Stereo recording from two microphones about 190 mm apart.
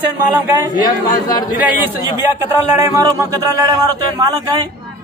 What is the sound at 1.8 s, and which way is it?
A man's voice, 10° right (ahead or behind).